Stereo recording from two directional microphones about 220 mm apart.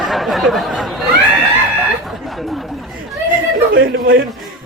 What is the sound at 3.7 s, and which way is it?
Speech, 45° right (ahead or behind).